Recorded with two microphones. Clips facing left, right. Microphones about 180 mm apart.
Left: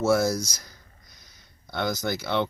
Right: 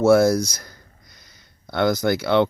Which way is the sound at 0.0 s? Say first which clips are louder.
Right 7 dB; 60° right (ahead or behind).